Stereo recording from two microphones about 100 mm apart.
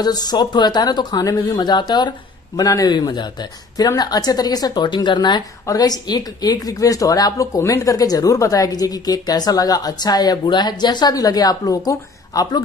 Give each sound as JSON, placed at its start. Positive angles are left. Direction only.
{"t": 0.0, "sound": "a woman's voice", "side_deg": 40}